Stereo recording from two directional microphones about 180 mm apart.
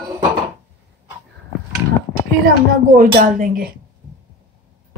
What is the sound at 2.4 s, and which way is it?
Speech, 55° right (ahead or behind).